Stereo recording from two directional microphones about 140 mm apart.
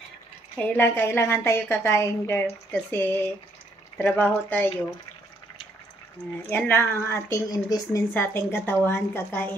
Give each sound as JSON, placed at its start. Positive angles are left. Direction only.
{"t": 0.6, "sound": "a woman's voice", "side_deg": 10}
{"t": 6.5, "sound": "speech", "side_deg": 15}
{"t": 8.1, "sound": "a woman's voice", "side_deg": 15}